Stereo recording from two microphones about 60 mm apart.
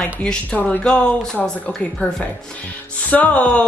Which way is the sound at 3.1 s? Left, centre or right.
Left.